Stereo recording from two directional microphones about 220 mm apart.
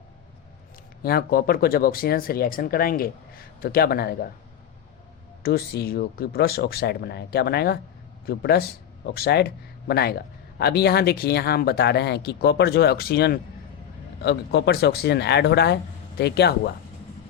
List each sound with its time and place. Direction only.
1.0 s a man's voice: 45° left (ahead or behind)
5.4 s a man's voice: 45° left (ahead or behind)